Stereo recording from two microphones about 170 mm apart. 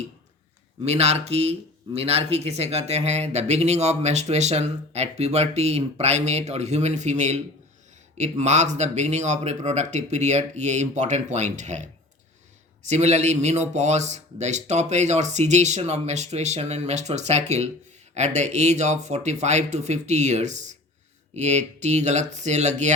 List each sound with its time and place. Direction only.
0.9 s speech: 40° right (ahead or behind)